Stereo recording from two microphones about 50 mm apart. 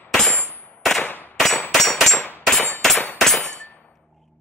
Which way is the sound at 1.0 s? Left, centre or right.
Left.